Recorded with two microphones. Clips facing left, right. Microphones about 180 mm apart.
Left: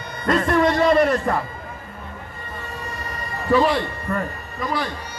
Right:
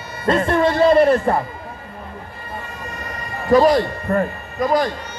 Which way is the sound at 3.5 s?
40° right (ahead or behind).